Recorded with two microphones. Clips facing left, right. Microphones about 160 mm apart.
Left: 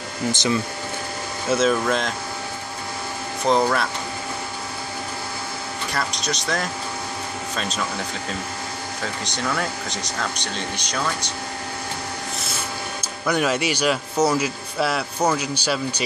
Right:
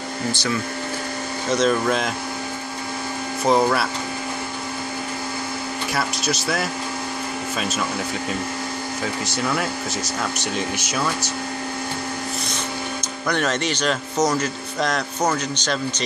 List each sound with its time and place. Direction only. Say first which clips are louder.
0.3 s speech: left 3 dB; 20° left (ahead or behind)
1.5 s speech: even; 5° left (ahead or behind)
3.4 s speech: right 1 dB; 5° right (ahead or behind)
5.9 s speech: right 2 dB; 5° right (ahead or behind)
9.2 s speech: right 1 dB; 5° right (ahead or behind)
13.3 s speech: left 1 dB; 10° left (ahead or behind)